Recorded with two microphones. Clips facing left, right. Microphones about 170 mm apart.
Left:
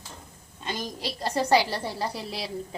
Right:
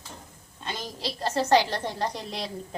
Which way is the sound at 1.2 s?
15° left (ahead or behind).